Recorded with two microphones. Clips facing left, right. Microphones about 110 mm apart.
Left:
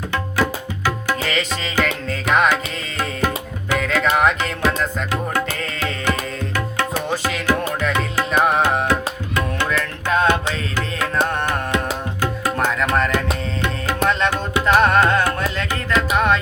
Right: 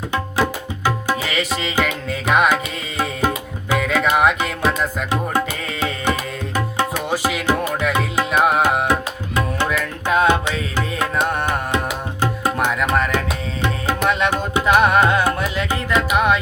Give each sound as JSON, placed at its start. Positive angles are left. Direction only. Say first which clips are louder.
{"t": 0.9, "sound": "music", "louder": "right 1 dB", "side_deg": -10}
{"t": 7.8, "sound": "tabla", "louder": "right 1 dB", "side_deg": -15}
{"t": 11.3, "sound": "music", "louder": "right 1 dB", "side_deg": -15}
{"t": 12.8, "sound": "music", "louder": "even", "side_deg": -15}